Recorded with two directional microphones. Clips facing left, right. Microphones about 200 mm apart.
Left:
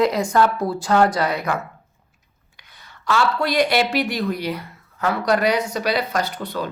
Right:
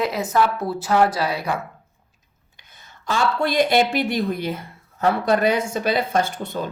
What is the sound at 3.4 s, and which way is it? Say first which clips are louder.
Speech: right 4 dB; 45° right (ahead or behind).